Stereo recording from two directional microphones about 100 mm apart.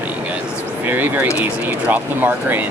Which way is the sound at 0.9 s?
20° right (ahead or behind).